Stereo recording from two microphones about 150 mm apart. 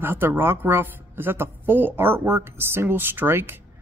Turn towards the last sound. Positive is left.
turn(degrees=-15)  # may be behind; listen again after turning